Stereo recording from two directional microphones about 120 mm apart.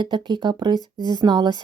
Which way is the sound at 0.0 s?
40° right (ahead or behind).